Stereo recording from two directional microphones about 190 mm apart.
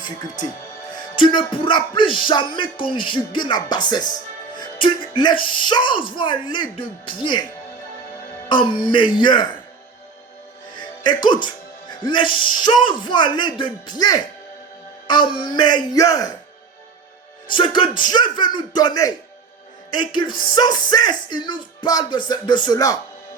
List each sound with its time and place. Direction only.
0.9 s speech: 25° left (ahead or behind)
8.4 s speech: 25° left (ahead or behind)
10.8 s speech: 25° left (ahead or behind)
17.5 s speech: 25° left (ahead or behind)